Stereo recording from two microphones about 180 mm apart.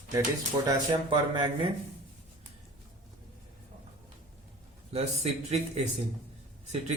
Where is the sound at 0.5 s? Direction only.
20° right (ahead or behind).